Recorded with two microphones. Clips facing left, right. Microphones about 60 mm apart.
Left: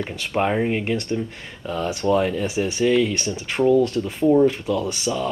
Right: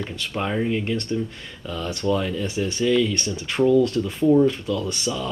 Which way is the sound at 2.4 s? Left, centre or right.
Centre.